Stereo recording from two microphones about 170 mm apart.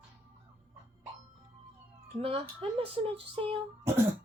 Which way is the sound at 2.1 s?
35° right (ahead or behind).